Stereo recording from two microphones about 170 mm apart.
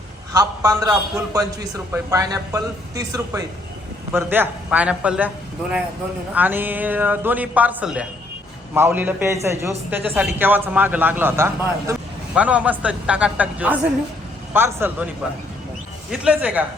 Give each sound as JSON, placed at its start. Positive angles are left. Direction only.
{"t": 0.3, "sound": "a man's voice", "side_deg": -20}
{"t": 6.3, "sound": "a man's voice", "side_deg": -10}